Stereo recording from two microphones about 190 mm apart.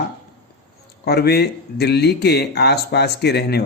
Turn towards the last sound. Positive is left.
turn(degrees=60)  # may be behind; listen again after turning